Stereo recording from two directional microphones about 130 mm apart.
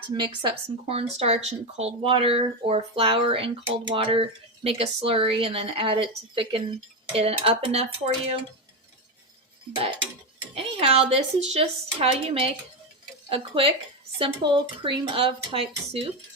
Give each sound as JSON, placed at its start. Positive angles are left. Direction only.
{"t": 0.1, "sound": "speech", "side_deg": -40}
{"t": 9.7, "sound": "speech", "side_deg": -40}